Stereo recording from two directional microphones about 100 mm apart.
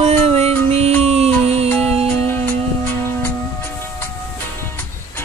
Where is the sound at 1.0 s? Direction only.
90° right.